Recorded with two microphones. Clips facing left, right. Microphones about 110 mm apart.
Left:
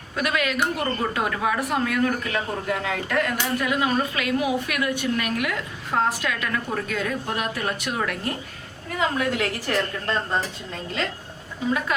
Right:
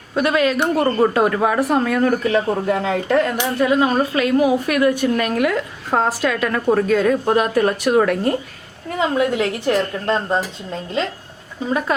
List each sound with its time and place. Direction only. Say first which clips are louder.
0.2 s a woman's voice: right 7 dB; 30° right (ahead or behind)
11.6 s a woman's voice: right 2 dB; 35° right (ahead or behind)